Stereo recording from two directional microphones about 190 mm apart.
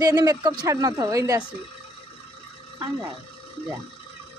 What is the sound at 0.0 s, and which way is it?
Speech, 20° right (ahead or behind).